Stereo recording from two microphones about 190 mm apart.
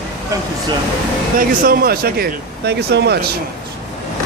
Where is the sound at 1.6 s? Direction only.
50° right (ahead or behind).